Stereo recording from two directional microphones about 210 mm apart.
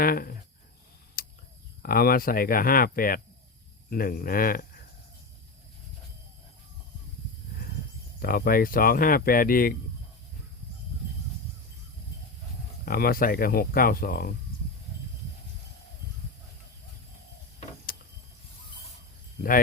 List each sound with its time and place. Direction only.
0.0 s speech: 45° left (ahead or behind)
1.2 s a sound: 45° left (ahead or behind)
1.8 s speech: 45° left (ahead or behind)
8.2 s speech: 45° left (ahead or behind)
12.8 s speech: 45° left (ahead or behind)
19.4 s speech: 45° left (ahead or behind)